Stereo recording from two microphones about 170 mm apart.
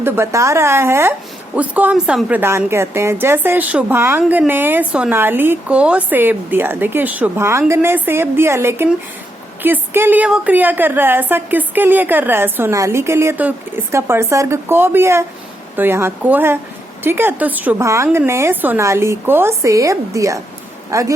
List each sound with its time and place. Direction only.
0.0 s a woman's voice: 15° right (ahead or behind)